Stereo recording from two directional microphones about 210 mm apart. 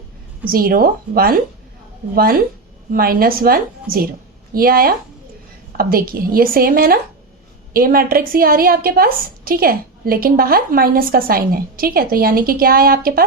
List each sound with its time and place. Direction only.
0.5 s a woman's voice: 45° right (ahead or behind)